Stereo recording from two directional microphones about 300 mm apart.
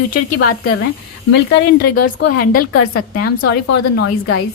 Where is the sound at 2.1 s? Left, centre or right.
Left.